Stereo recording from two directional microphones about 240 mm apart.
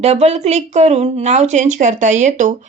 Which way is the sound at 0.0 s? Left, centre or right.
Right.